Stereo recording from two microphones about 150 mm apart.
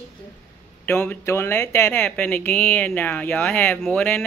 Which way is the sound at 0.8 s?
15° left (ahead or behind).